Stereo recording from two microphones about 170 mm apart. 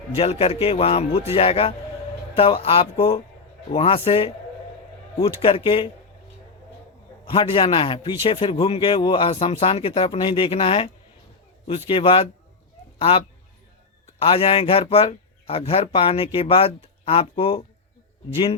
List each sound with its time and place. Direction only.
0.2 s a man's voice: 35° left (ahead or behind)
7.3 s a man's voice: 30° left (ahead or behind)